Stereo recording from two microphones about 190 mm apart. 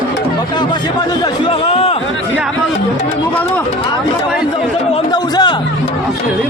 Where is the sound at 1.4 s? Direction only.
30° left (ahead or behind).